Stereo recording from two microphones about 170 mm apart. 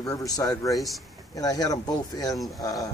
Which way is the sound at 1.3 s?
20° left (ahead or behind).